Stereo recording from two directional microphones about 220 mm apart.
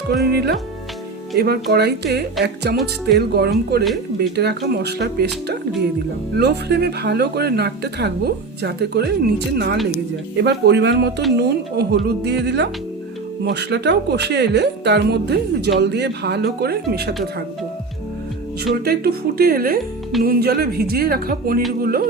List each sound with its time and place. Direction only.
0.1 s speech: 45° right (ahead or behind)
18.6 s speech: 45° right (ahead or behind)